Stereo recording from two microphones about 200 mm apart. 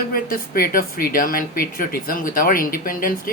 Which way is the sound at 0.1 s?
45° left (ahead or behind).